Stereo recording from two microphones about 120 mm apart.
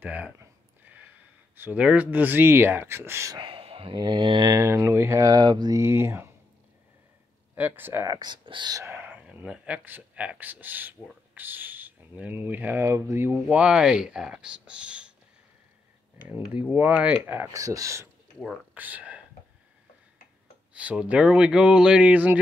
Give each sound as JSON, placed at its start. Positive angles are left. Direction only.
{"t": 0.0, "sound": "a sound", "side_deg": -15}
{"t": 1.6, "sound": "speech", "side_deg": -10}
{"t": 3.3, "sound": "speech", "side_deg": -45}
{"t": 5.8, "sound": "speech", "side_deg": -20}
{"t": 7.5, "sound": "speech", "side_deg": -15}
{"t": 8.1, "sound": "speech", "side_deg": -35}
{"t": 8.9, "sound": "speech", "side_deg": -15}
{"t": 13.5, "sound": "speech", "side_deg": -10}
{"t": 16.2, "sound": "speech", "side_deg": -15}
{"t": 17.5, "sound": "speech", "side_deg": -30}
{"t": 18.8, "sound": "speech", "side_deg": -15}
{"t": 20.7, "sound": "speech", "side_deg": -10}